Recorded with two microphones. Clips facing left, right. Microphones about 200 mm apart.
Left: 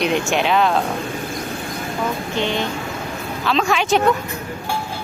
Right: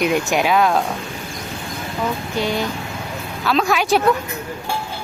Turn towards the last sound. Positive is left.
turn(degrees=-5)  # may be behind; listen again after turning